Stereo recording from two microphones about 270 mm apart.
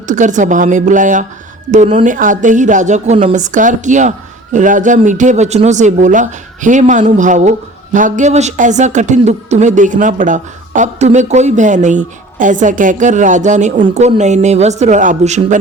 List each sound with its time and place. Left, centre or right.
0.1 s speech: right